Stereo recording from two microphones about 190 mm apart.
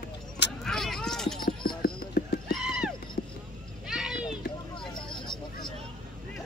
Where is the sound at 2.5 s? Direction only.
5° right (ahead or behind).